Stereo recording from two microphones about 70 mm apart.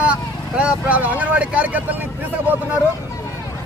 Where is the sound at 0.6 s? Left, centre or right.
Centre.